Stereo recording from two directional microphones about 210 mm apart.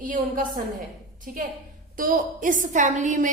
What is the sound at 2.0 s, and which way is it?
Speech, 40° right (ahead or behind).